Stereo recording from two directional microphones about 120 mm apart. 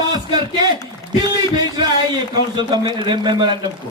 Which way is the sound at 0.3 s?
40° right (ahead or behind).